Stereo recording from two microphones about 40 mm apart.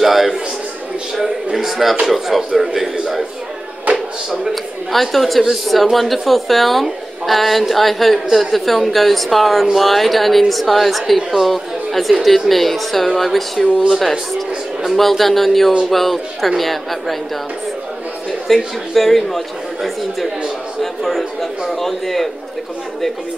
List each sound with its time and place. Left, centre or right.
0.0 s a sound: centre
2.0 s speech: centre
3.9 s a sound: centre
4.9 s speech: centre
14.9 s speech: centre
18.5 s a man's voice: centre